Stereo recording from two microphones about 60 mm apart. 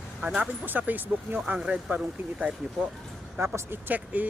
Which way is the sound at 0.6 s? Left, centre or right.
Right.